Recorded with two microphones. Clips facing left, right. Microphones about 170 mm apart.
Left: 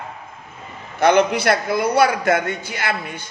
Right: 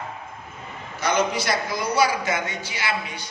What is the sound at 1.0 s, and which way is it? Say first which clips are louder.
A man's voice: left 8 dB; 60° left (ahead or behind).